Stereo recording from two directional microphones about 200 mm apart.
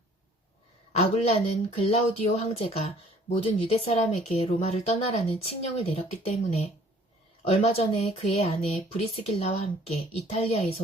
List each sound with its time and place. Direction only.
0.9 s speech: 30° left (ahead or behind)